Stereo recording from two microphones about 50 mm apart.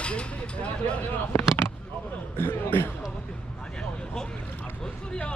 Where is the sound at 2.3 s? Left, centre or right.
Left.